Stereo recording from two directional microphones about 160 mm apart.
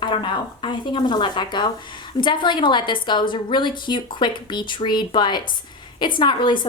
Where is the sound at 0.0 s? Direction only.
30° left (ahead or behind).